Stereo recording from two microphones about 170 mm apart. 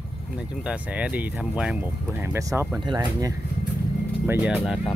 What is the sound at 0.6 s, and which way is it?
Speech, 5° right (ahead or behind).